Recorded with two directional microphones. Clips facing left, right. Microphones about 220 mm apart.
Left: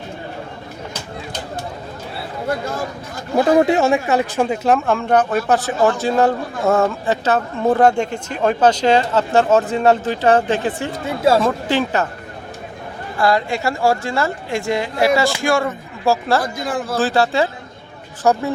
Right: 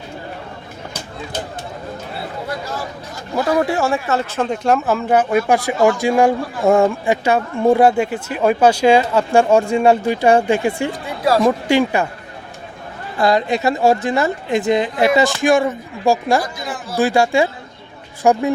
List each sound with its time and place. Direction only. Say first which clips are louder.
3.3 s speech: left 4 dB; 25° left (ahead or behind); by 10.9 s 10° right (ahead or behind)
11.0 s speech: left 2 dB; 25° left (ahead or behind)
11.4 s speech: right 4 dB; 10° right (ahead or behind)
13.1 s speech: right 2 dB; 20° right (ahead or behind)
16.4 s a man's voice: left 4 dB; 55° left (ahead or behind)
17.0 s speech: right 3 dB; 15° right (ahead or behind)